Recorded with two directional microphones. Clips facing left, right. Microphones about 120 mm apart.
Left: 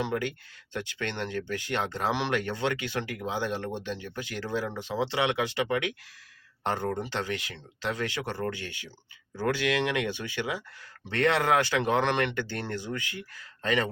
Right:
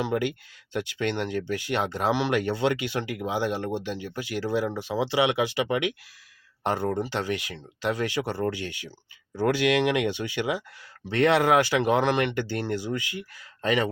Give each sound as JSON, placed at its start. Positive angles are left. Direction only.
{"t": 0.0, "sound": "speech", "side_deg": -15}